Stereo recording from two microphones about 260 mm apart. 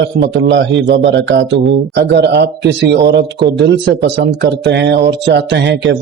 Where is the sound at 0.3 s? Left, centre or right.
Right.